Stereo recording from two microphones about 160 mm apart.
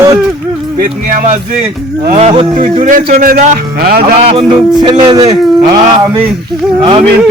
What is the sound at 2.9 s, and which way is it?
A man's voice, 60° right (ahead or behind).